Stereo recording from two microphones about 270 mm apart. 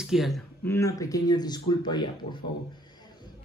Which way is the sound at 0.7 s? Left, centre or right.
Centre.